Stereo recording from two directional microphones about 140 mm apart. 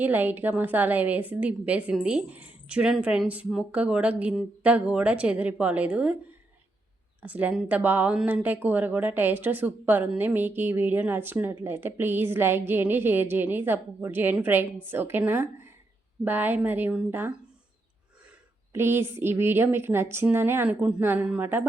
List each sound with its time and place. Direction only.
0.0 s a woman's voice: 15° right (ahead or behind)
7.2 s a woman's voice: 10° right (ahead or behind)
18.7 s a woman's voice: 15° right (ahead or behind)